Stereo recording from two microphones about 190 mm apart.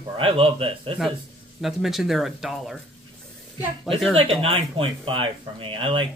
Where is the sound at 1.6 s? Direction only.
Centre (ahead or behind).